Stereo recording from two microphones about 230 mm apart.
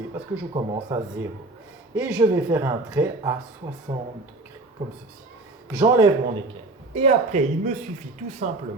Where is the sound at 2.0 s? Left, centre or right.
Centre.